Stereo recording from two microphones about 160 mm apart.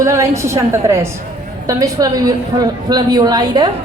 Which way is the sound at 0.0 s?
20° right (ahead or behind).